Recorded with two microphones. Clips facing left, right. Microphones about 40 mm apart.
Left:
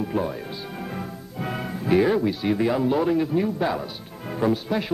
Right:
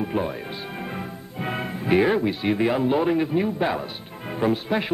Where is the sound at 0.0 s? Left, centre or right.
Right.